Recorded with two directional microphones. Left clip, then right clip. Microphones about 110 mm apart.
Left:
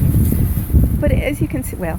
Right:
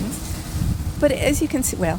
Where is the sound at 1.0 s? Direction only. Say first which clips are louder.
Right 3 dB; 15° right (ahead or behind).